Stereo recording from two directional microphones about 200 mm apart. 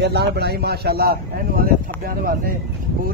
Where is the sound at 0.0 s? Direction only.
55° right (ahead or behind).